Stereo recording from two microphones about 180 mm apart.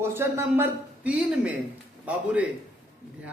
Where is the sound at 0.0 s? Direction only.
15° right (ahead or behind).